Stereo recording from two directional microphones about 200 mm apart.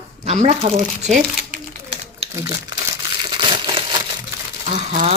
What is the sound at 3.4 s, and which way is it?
Crushing, 25° right (ahead or behind).